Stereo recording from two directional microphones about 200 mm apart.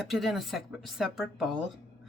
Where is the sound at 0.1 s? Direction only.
Centre (ahead or behind).